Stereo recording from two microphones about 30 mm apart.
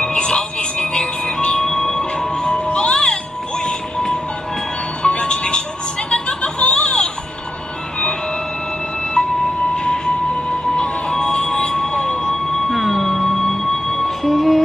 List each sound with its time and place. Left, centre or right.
0.0 s music: left
1.7 s music: centre
2.5 s music: left
5.0 s music: left
6.0 s a sound: left
10.8 s music: left
12.7 s music: centre